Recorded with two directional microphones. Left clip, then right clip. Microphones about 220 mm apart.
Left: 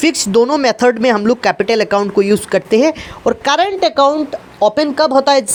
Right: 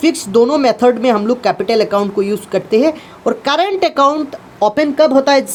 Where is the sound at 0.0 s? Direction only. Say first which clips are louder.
Even; 20° left (ahead or behind).